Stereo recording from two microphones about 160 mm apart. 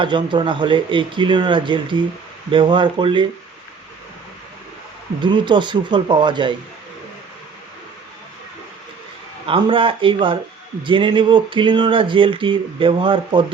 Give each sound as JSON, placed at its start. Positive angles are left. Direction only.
{"t": 0.0, "sound": "speech", "side_deg": -30}
{"t": 5.2, "sound": "speech", "side_deg": -30}
{"t": 9.5, "sound": "speech", "side_deg": -35}